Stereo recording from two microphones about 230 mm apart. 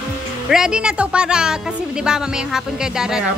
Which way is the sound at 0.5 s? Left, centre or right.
Centre.